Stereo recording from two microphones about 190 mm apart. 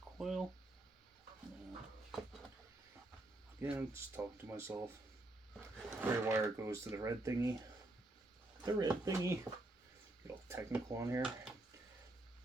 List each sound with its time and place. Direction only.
0.2 s a sound: centre (ahead or behind)
3.6 s speech: 10° right (ahead or behind)
8.6 s speech: 20° right (ahead or behind)
10.5 s speech: 15° right (ahead or behind)